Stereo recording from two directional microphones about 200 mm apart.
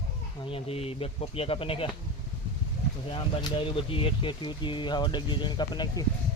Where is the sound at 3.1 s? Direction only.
25° left (ahead or behind).